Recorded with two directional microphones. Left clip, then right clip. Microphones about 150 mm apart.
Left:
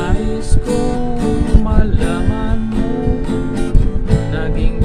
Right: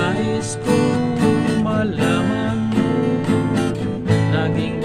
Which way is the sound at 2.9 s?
25° right (ahead or behind).